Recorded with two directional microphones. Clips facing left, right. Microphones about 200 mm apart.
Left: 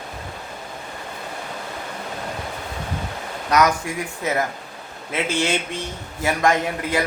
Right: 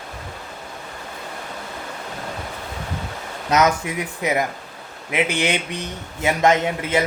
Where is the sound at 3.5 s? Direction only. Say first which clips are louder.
Right 1 dB; 20° right (ahead or behind).